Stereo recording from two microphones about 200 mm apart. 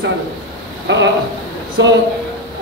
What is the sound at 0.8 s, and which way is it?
A man's voice, 65° right (ahead or behind).